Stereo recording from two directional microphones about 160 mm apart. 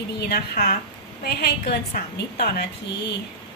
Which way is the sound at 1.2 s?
80° left.